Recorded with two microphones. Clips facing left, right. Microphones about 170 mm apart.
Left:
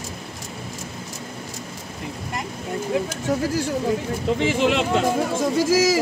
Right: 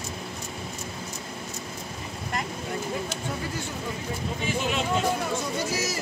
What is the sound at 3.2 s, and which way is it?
Speech, 90° left.